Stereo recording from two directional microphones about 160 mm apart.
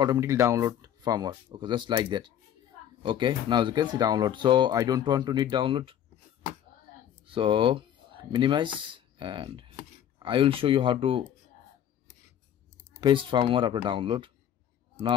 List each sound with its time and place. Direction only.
0.0 s speech: 20° right (ahead or behind)
7.2 s speech: 30° right (ahead or behind)
13.0 s speech: 30° right (ahead or behind)